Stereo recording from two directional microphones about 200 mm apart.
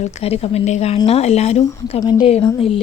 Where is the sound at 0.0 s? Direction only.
30° left (ahead or behind).